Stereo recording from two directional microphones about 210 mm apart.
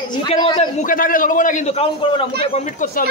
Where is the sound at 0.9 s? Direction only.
40° left (ahead or behind).